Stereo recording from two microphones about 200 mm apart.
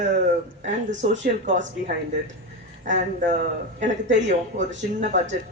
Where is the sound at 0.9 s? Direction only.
65° right (ahead or behind).